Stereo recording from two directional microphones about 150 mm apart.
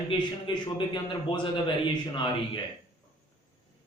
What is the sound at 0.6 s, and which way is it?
A man's voice, 30° left (ahead or behind).